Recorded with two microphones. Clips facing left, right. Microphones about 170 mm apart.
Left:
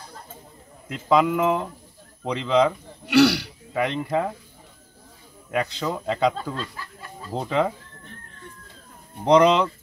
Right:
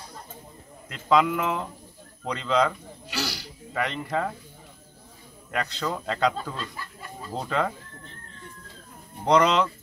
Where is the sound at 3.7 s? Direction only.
10° left (ahead or behind).